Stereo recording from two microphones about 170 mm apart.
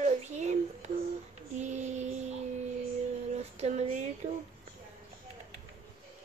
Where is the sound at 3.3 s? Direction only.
40° right (ahead or behind).